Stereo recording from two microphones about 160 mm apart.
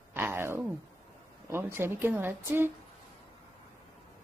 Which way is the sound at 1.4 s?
15° right (ahead or behind).